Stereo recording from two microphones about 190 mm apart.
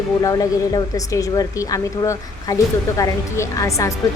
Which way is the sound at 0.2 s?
20° left (ahead or behind).